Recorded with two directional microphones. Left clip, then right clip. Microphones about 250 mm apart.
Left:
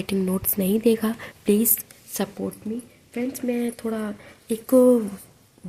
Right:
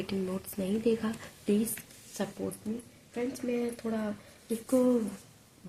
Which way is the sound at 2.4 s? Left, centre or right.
Left.